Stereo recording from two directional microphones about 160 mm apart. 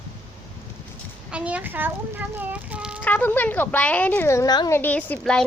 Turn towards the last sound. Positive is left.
turn(degrees=5)  # may be behind; listen again after turning